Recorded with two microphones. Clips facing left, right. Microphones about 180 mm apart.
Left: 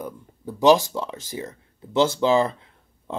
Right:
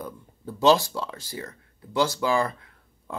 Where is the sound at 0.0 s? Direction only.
15° left (ahead or behind).